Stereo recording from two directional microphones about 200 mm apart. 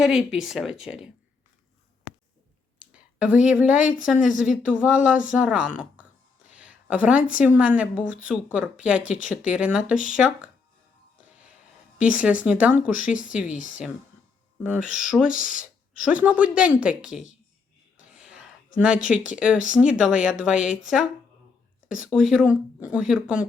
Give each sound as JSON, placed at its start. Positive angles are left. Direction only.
{"t": 0.0, "sound": "speech", "side_deg": -5}
{"t": 2.7, "sound": "a sound", "side_deg": -5}
{"t": 4.0, "sound": "speech", "side_deg": -5}
{"t": 5.7, "sound": "a sound", "side_deg": -5}
{"t": 7.3, "sound": "speech", "side_deg": -5}
{"t": 11.9, "sound": "speech", "side_deg": -5}
{"t": 13.6, "sound": "speech", "side_deg": 40}
{"t": 14.6, "sound": "speech", "side_deg": -5}
{"t": 18.1, "sound": "whispering", "side_deg": -5}
{"t": 19.0, "sound": "speech", "side_deg": -5}